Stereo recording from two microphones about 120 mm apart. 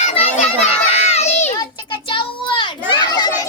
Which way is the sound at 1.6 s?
40° left (ahead or behind).